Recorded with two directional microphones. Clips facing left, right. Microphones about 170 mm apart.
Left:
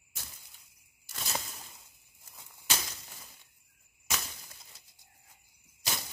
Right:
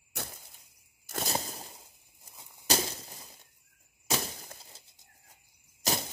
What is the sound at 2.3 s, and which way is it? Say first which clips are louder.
Walk: right 1 dB; 20° right (ahead or behind).